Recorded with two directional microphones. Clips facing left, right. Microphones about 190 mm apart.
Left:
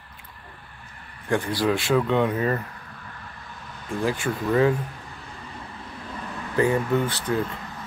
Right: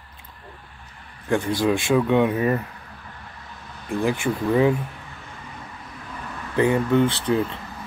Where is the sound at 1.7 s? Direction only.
20° right (ahead or behind).